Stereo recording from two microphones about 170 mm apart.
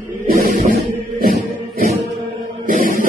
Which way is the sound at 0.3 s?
55° right (ahead or behind).